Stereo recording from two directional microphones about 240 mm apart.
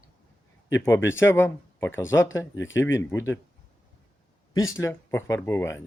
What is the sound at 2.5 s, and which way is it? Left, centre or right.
Speech, left.